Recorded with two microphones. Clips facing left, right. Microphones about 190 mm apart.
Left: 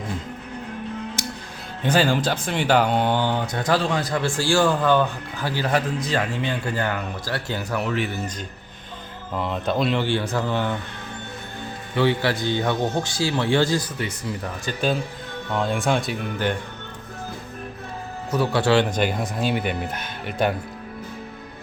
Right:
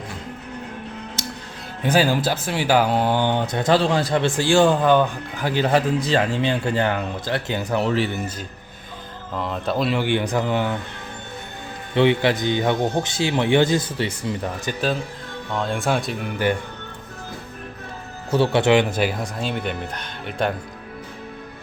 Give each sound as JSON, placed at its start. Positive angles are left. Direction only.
{"t": 1.8, "sound": "speech", "side_deg": -10}
{"t": 3.2, "sound": "speech", "side_deg": -25}
{"t": 9.3, "sound": "speech", "side_deg": 0}
{"t": 10.0, "sound": "speech", "side_deg": -15}
{"t": 11.9, "sound": "speech", "side_deg": -20}
{"t": 15.5, "sound": "speech", "side_deg": 0}
{"t": 18.3, "sound": "speech", "side_deg": -30}